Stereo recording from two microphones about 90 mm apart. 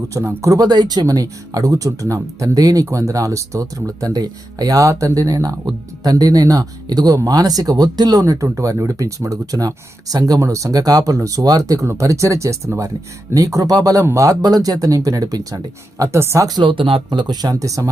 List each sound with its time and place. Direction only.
0.2 s speech: 35° right (ahead or behind); by 8.2 s 50° right (ahead or behind)
8.2 s speech: 35° right (ahead or behind)
16.6 s speech: 70° right (ahead or behind)
17.2 s speech: 50° right (ahead or behind)